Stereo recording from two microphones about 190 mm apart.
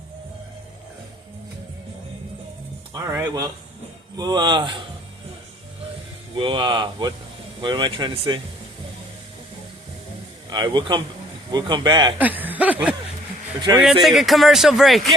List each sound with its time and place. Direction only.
2.9 s speech: 15° right (ahead or behind)
6.3 s speech: 25° right (ahead or behind)
10.5 s speech: 25° right (ahead or behind)
12.2 s snicker: 10° right (ahead or behind)
13.7 s snicker: 15° right (ahead or behind)
14.0 s speech: centre (ahead or behind)